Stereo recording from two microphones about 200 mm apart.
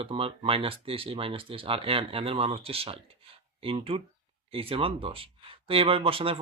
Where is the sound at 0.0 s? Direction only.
25° right (ahead or behind).